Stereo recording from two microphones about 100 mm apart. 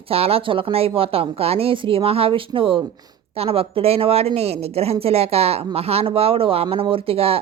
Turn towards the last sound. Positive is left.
turn(degrees=-75)  # may be behind; listen again after turning